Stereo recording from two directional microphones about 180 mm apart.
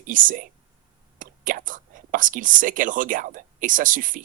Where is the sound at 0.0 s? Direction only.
50° right (ahead or behind).